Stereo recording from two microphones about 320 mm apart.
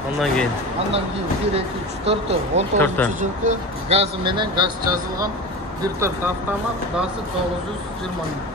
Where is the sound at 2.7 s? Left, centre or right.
Centre.